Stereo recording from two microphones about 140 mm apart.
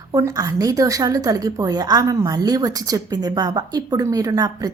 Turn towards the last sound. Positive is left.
turn(degrees=-25)  # may be behind; listen again after turning